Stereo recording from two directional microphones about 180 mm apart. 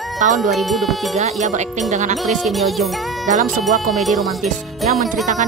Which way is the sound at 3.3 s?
40° right (ahead or behind).